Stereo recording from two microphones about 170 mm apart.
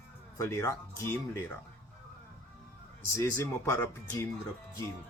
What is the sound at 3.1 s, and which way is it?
Speech, 15° left (ahead or behind).